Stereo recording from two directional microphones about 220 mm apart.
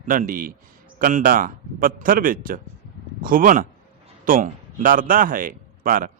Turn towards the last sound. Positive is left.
turn(degrees=-40)  # may be behind; listen again after turning